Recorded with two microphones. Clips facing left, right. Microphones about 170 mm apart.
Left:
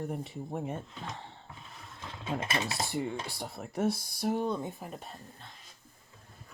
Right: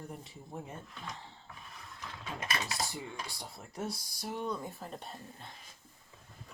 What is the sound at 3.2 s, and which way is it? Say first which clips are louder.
Speech: left 7 dB; 60° left (ahead or behind).